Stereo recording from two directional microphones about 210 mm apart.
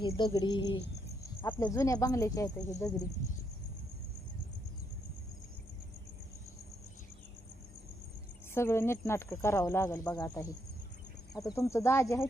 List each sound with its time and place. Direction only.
0.0 s speech: 20° left (ahead or behind)
8.5 s speech: 10° left (ahead or behind)